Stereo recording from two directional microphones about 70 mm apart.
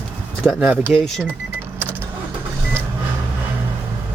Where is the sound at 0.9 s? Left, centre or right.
Centre.